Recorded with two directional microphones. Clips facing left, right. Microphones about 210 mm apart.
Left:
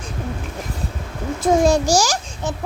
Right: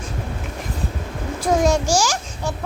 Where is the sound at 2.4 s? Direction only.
20° left (ahead or behind).